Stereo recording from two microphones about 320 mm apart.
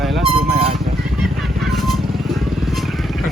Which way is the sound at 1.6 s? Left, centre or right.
Centre.